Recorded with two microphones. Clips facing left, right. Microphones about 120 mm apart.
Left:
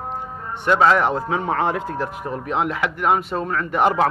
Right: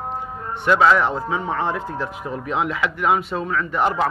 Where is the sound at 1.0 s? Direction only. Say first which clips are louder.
Left 1 dB; 60° left (ahead or behind).